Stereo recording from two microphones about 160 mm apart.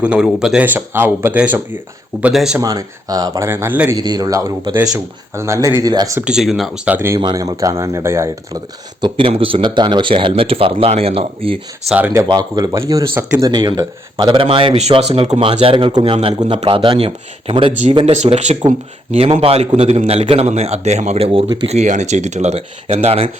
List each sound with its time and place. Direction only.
0.0 s speech: 5° right (ahead or behind)
2.6 s speech: 25° right (ahead or behind)
6.1 s speech: 5° right (ahead or behind)
6.8 s speech: 15° right (ahead or behind)
7.2 s speech: 25° right (ahead or behind)
11.9 s speech: 10° right (ahead or behind)
12.3 s speech: 25° right (ahead or behind)